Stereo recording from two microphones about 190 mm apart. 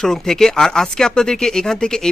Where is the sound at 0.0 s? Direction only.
Centre (ahead or behind).